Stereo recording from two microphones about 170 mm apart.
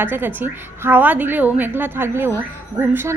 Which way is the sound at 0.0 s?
10° right (ahead or behind).